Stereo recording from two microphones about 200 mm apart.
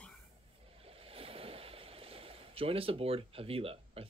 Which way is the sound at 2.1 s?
30° right (ahead or behind).